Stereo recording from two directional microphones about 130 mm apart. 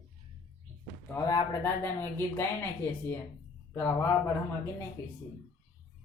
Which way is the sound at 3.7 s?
15° left (ahead or behind).